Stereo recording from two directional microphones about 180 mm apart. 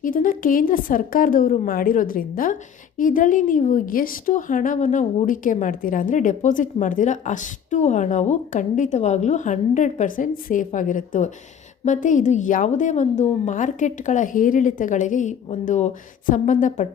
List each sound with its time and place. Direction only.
0.0 s speech: 50° left (ahead or behind)